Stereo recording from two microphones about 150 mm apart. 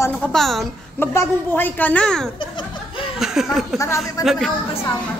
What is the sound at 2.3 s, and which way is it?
Laughter, 35° left (ahead or behind).